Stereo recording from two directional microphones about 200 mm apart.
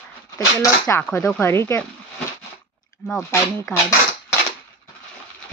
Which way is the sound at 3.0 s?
5° left (ahead or behind).